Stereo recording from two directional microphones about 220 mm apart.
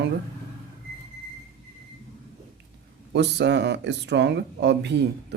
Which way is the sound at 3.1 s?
50° right (ahead or behind).